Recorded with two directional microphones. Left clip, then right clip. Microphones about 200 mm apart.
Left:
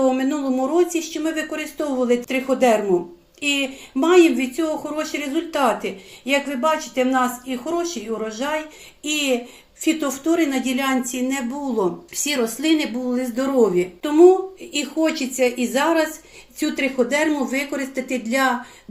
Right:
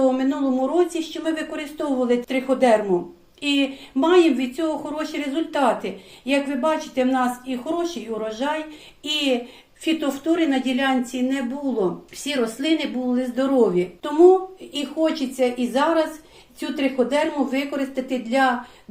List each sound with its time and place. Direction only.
0.0 s speech: 35° left (ahead or behind)